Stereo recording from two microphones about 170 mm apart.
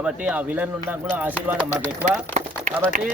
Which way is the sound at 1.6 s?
10° left (ahead or behind).